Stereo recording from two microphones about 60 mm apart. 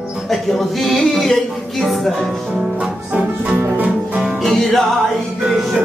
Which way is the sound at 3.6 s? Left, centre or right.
Right.